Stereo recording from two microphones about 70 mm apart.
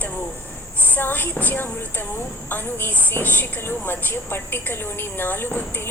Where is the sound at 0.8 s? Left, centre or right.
Left.